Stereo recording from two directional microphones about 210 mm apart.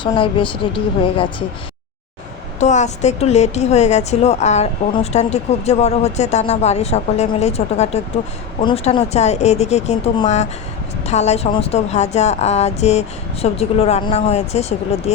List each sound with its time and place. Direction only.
0.0 s a woman's voice: 25° left (ahead or behind)
2.6 s a woman's voice: 35° left (ahead or behind)